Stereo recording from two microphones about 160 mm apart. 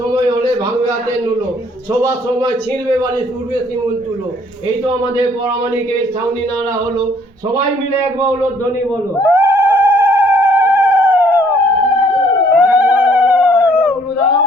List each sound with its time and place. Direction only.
0.1 s a sound: 25° right (ahead or behind)
2.0 s a man's voice: 25° right (ahead or behind)
9.2 s cat: 15° right (ahead or behind)